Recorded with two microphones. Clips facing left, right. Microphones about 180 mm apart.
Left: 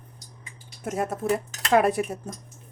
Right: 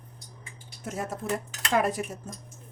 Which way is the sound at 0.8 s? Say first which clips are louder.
Left 6 dB; 60° left (ahead or behind).